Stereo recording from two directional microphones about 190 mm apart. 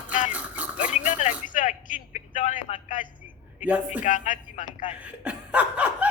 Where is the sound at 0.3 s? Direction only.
5° right (ahead or behind).